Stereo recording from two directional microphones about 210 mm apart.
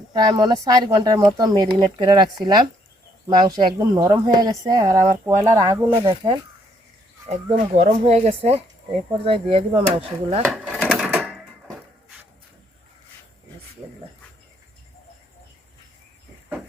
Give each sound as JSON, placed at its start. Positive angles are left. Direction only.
{"t": 0.1, "sound": "speech", "side_deg": -20}
{"t": 7.5, "sound": "speech", "side_deg": -30}
{"t": 10.4, "sound": "wood", "side_deg": 0}